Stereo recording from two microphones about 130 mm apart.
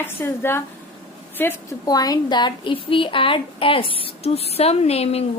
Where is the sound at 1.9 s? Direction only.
30° left (ahead or behind); by 5.2 s 50° left (ahead or behind).